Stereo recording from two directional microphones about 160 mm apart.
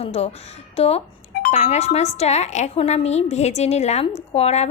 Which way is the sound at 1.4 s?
55° left (ahead or behind).